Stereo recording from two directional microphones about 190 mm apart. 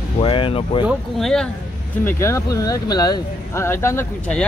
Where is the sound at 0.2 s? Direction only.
30° left (ahead or behind).